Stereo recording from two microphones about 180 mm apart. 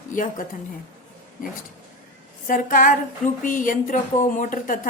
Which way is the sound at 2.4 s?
45° left (ahead or behind).